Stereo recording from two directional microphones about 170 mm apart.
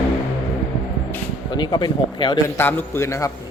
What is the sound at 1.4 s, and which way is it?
Speech, 25° left (ahead or behind).